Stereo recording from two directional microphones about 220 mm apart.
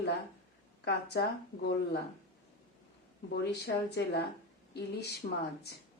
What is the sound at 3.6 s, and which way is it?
Speech, 50° left (ahead or behind).